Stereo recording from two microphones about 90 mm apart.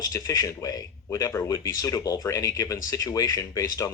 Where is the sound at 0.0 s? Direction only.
40° left (ahead or behind).